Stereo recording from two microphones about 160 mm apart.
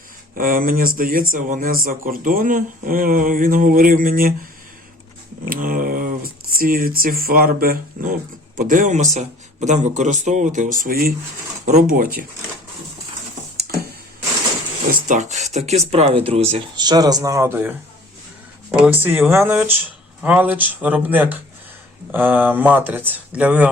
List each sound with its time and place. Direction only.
0.3 s speech: 60° right (ahead or behind)
5.5 s speech: 60° right (ahead or behind)
8.5 s a man's voice: 55° right (ahead or behind)
15.0 s a man's voice: 50° right (ahead or behind)
16.7 s speech: 25° right (ahead or behind); by 23.6 s 10° right (ahead or behind)